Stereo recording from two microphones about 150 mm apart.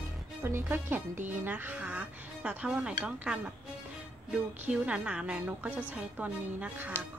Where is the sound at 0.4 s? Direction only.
15° right (ahead or behind).